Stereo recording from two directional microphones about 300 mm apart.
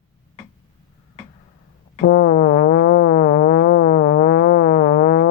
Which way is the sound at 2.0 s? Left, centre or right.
Left.